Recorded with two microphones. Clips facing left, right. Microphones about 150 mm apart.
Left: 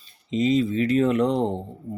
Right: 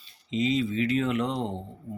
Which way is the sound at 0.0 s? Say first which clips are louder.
Left 4 dB; 40° left (ahead or behind).